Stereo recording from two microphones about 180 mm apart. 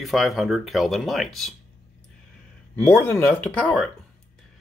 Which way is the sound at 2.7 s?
10° left (ahead or behind).